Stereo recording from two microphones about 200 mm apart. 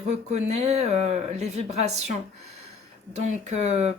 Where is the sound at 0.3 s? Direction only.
35° right (ahead or behind).